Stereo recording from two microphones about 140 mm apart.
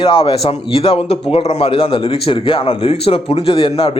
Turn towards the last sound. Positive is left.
turn(degrees=45)  # may be behind; listen again after turning